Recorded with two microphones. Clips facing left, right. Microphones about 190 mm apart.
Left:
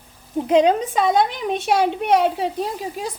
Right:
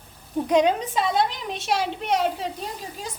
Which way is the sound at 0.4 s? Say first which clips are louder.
Left 4 dB; 30° left (ahead or behind).